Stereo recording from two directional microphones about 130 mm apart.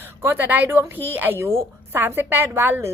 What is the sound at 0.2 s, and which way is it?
A woman's voice, 15° right (ahead or behind).